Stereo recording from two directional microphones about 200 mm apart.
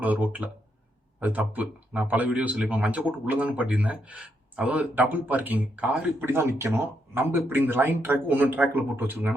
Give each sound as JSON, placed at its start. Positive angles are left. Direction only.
{"t": 0.0, "sound": "a man's voice", "side_deg": -10}